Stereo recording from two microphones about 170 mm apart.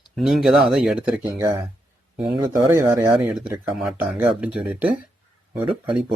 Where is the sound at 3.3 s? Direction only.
5° right (ahead or behind).